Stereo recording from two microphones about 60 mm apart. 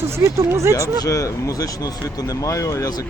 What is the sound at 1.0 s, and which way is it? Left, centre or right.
Speech, left.